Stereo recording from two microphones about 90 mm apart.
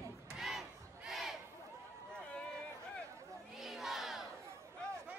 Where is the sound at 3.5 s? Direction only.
Centre (ahead or behind).